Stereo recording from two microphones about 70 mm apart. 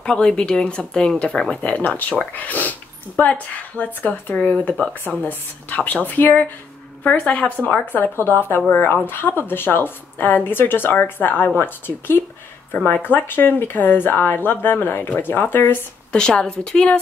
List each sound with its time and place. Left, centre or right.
0.0 s speech: centre
1.7 s speech: left
16.1 s speech: centre